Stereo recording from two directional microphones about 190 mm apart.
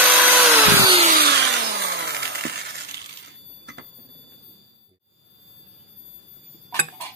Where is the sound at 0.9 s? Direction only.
30° right (ahead or behind).